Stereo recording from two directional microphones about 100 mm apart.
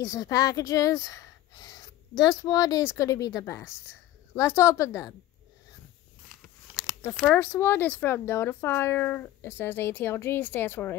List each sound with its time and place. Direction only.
0.0 s speech: 35° left (ahead or behind)
7.2 s speech: 20° left (ahead or behind)